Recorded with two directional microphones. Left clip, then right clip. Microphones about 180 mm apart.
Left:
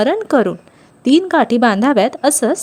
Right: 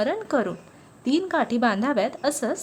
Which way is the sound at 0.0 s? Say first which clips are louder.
Left 10 dB; 35° left (ahead or behind).